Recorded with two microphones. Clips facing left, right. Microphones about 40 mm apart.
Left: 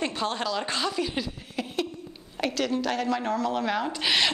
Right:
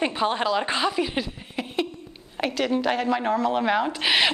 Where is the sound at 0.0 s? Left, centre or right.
Centre.